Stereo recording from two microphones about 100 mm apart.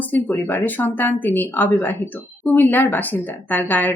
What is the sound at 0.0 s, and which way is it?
A woman's voice, 15° left (ahead or behind).